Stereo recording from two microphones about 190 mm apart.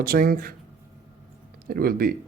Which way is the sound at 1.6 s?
50° right (ahead or behind).